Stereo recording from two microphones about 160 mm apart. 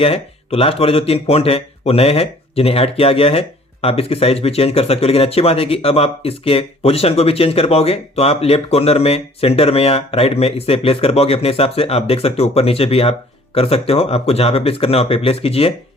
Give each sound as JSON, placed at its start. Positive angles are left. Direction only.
{"t": 0.0, "sound": "speech", "side_deg": 35}